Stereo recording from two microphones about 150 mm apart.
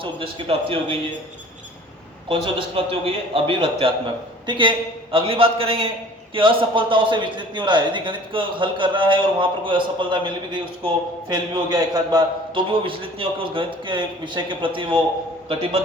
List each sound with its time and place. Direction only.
0.0 s a man's voice: 35° right (ahead or behind)
2.3 s a man's voice: 35° right (ahead or behind)